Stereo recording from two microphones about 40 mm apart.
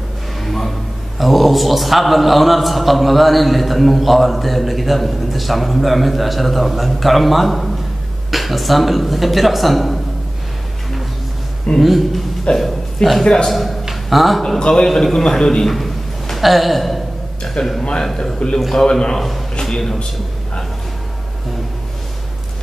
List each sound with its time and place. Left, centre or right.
0.4 s a man's voice: centre
11.8 s a man's voice: centre
13.2 s a man's voice: centre
13.5 s a man's voice: centre
13.8 s a sound: centre
14.6 s a man's voice: centre
15.7 s a sound: centre
17.6 s a man's voice: left
19.6 s speech: centre